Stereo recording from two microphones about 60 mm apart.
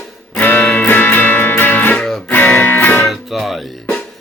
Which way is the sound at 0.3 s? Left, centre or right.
Left.